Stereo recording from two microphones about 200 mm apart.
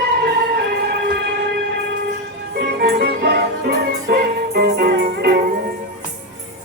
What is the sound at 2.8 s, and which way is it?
Music, 50° right (ahead or behind).